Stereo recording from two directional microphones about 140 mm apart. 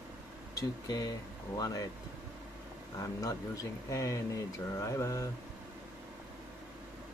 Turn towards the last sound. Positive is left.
turn(degrees=20)  # may be behind; listen again after turning